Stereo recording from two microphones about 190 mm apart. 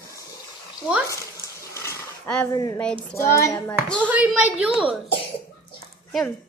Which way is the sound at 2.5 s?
20° left (ahead or behind).